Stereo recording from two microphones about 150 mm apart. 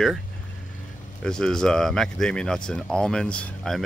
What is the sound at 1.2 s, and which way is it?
Speech, 5° left (ahead or behind).